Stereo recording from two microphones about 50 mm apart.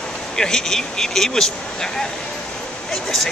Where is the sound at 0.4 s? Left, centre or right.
Centre.